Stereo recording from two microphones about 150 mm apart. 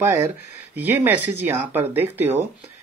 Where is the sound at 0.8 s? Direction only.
15° right (ahead or behind).